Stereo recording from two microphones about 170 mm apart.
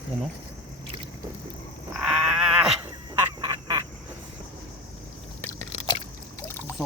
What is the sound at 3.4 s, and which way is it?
Duck, 25° right (ahead or behind).